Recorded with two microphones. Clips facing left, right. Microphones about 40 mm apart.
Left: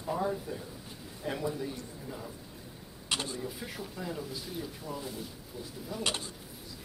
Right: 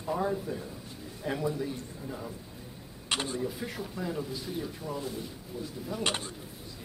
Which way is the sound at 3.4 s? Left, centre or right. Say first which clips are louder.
Right 4 dB; centre.